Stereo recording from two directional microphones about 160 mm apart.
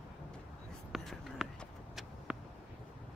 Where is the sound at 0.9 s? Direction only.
Centre (ahead or behind).